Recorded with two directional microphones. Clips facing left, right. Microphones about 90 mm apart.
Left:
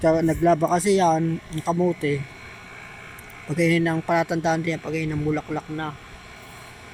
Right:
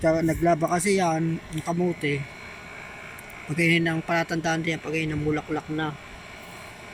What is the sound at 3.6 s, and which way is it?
A man's voice, 25° left (ahead or behind).